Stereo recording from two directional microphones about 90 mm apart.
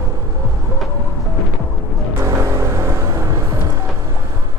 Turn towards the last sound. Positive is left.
turn(degrees=-35)  # may be behind; listen again after turning